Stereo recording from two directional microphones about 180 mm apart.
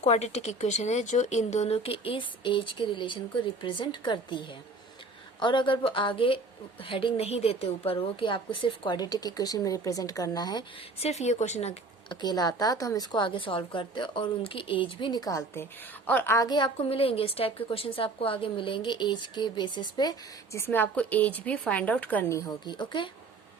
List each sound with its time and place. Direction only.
0.0 s a woman's voice: 40° left (ahead or behind); by 10.7 s 20° left (ahead or behind)
11.0 s speech: 40° left (ahead or behind)
12.2 s a woman's voice: 20° left (ahead or behind)